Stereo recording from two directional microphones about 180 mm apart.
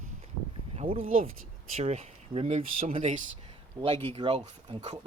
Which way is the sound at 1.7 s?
40° right (ahead or behind).